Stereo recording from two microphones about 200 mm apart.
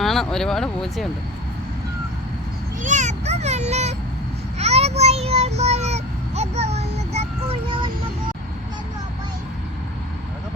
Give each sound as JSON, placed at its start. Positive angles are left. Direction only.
{"t": 0.0, "sound": "speech", "side_deg": 0}
{"t": 2.8, "sound": "a sound", "side_deg": -35}
{"t": 4.5, "sound": "child singing", "side_deg": -30}